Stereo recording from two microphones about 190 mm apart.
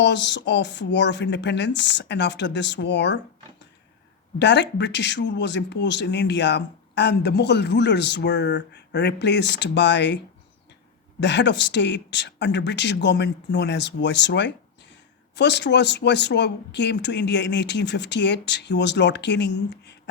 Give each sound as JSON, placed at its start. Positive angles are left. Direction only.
{"t": 0.0, "sound": "speech", "side_deg": 65}
{"t": 4.4, "sound": "speech", "side_deg": 65}
{"t": 11.2, "sound": "speech", "side_deg": 65}